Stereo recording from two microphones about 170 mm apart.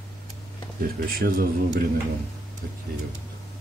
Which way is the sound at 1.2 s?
60° right (ahead or behind).